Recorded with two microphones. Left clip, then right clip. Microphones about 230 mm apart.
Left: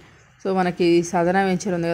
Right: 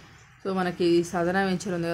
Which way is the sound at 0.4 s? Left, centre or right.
Left.